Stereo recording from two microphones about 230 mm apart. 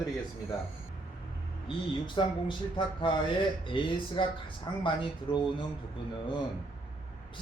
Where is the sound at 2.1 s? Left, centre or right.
Left.